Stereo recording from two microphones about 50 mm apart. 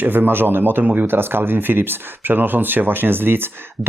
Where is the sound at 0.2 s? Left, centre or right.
Right.